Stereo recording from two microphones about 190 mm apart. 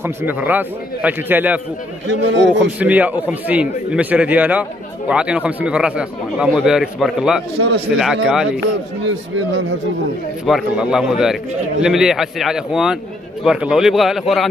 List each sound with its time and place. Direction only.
0.0 s a man's voice: 10° right (ahead or behind)
2.0 s a man's voice: 70° right (ahead or behind)
2.8 s a man's voice: 10° right (ahead or behind)
7.5 s a man's voice: 60° right (ahead or behind)
7.9 s a man's voice: 5° right (ahead or behind)
10.4 s a man's voice: centre (ahead or behind)